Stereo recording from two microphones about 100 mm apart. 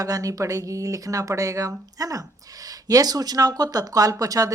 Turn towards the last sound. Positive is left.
turn(degrees=-35)  # may be behind; listen again after turning